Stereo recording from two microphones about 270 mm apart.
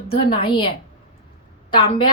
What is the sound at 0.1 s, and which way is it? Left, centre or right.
Speech, left.